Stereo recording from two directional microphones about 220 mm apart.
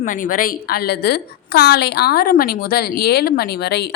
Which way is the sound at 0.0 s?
35° left (ahead or behind).